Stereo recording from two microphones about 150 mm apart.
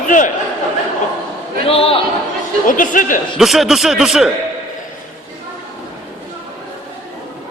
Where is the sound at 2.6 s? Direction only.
60° left (ahead or behind).